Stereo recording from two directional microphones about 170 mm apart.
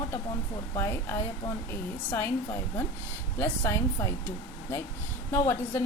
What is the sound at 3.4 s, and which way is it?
Speech, 15° left (ahead or behind).